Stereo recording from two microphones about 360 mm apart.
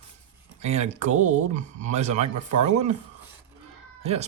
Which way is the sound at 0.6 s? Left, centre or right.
Centre.